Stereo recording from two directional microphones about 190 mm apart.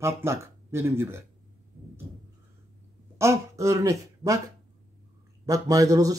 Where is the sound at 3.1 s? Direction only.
15° right (ahead or behind).